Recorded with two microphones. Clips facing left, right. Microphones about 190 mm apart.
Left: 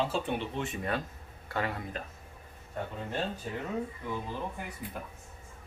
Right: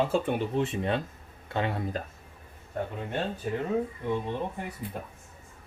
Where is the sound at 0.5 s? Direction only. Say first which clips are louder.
Right 6 dB; 30° right (ahead or behind).